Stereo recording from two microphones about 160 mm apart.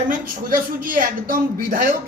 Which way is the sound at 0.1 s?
60° right (ahead or behind).